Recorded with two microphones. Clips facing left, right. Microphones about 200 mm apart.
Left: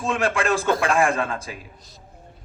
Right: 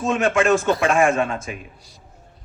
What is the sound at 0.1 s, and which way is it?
A man's voice, 35° left (ahead or behind).